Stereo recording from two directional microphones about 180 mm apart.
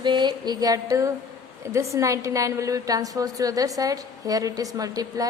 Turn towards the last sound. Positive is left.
turn(degrees=-20)  # may be behind; listen again after turning